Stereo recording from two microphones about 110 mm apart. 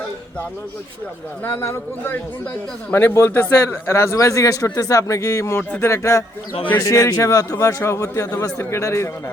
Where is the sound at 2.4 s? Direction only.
10° left (ahead or behind).